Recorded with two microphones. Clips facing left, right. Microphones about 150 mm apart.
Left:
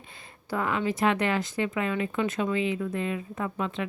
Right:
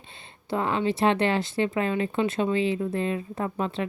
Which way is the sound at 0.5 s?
30° right (ahead or behind).